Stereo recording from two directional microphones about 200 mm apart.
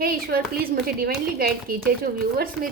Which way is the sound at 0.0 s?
45° right (ahead or behind).